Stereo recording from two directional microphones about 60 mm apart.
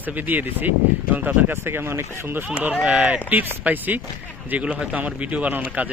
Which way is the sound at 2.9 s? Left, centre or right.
Right.